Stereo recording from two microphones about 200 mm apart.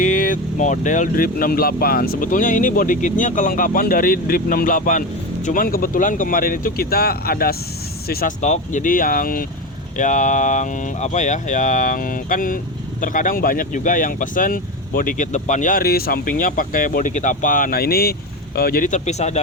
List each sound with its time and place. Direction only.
0.0 s speech: 40° left (ahead or behind)